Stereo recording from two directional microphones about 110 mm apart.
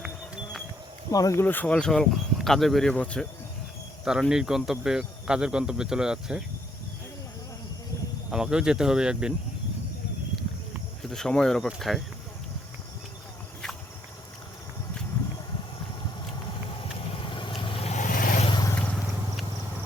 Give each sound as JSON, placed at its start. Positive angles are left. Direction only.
{"t": 1.1, "sound": "speech", "side_deg": 30}
{"t": 4.0, "sound": "speech", "side_deg": -5}
{"t": 8.3, "sound": "speech", "side_deg": -5}
{"t": 11.1, "sound": "speech", "side_deg": 5}
{"t": 16.8, "sound": "vehicle", "side_deg": 55}
{"t": 17.8, "sound": "vehicle", "side_deg": 90}
{"t": 18.7, "sound": "vehicle", "side_deg": 15}